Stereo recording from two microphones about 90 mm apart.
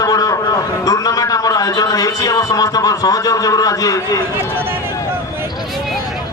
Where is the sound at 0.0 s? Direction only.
40° left (ahead or behind).